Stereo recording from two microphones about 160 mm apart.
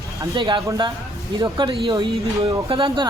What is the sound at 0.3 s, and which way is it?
Speech, 30° right (ahead or behind).